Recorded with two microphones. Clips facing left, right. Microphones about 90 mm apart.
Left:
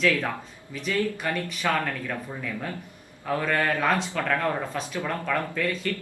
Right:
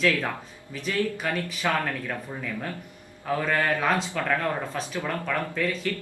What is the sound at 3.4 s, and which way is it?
Speech, 5° right (ahead or behind).